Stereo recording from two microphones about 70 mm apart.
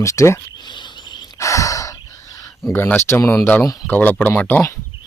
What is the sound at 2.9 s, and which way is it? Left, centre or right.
Speech, left.